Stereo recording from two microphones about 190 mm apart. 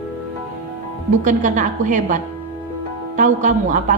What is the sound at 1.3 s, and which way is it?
Speech, 40° right (ahead or behind).